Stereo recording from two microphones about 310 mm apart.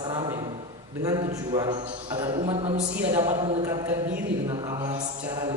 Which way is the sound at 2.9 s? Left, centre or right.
Centre.